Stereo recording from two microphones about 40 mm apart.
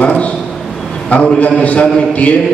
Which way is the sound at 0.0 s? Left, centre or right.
Left.